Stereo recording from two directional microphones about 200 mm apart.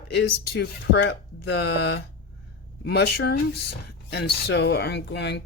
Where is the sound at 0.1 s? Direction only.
55° left (ahead or behind).